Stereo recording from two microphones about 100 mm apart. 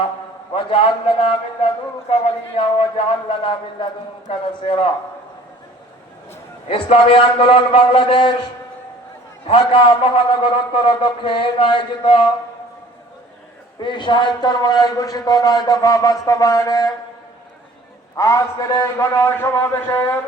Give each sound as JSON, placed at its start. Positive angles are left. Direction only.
{"t": 2.0, "sound": "a man's voice", "side_deg": 85}
{"t": 3.2, "sound": "a man's voice", "side_deg": 60}
{"t": 6.7, "sound": "a man's voice", "side_deg": 60}
{"t": 9.5, "sound": "a man's voice", "side_deg": 55}
{"t": 13.7, "sound": "a man's voice", "side_deg": 50}
{"t": 18.2, "sound": "a man's voice", "side_deg": 30}